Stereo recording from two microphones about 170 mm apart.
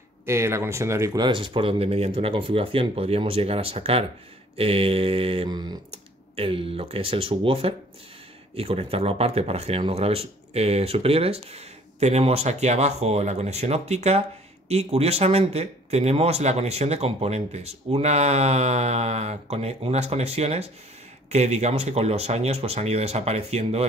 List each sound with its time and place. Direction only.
0.3 s speech: 15° right (ahead or behind); by 23.9 s 40° right (ahead or behind)